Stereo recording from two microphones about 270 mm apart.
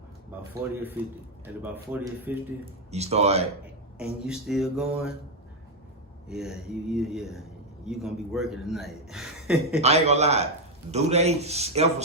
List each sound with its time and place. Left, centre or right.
0.6 s speech: centre
2.9 s a man's voice: right
3.9 s speech: centre
6.2 s speech: centre
9.8 s a man's voice: right